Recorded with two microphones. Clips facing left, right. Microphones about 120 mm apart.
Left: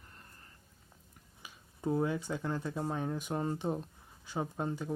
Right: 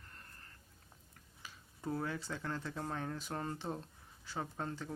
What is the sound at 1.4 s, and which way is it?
Speech, 15° left (ahead or behind).